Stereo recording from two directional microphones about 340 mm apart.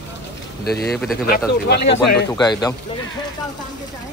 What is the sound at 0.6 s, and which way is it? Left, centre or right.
Speech, left.